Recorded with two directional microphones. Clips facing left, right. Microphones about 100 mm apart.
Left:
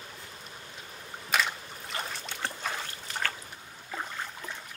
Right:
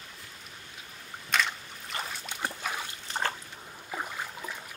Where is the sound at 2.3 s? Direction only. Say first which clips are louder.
Right 1 dB; 15° right (ahead or behind).